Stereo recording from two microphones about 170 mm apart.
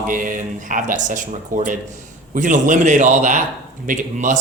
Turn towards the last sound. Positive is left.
turn(degrees=-50)  # may be behind; listen again after turning